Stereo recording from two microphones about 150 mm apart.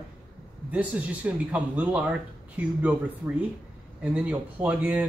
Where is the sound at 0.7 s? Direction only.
10° right (ahead or behind).